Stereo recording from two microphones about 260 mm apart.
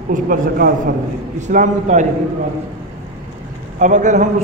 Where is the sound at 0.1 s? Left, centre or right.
Right.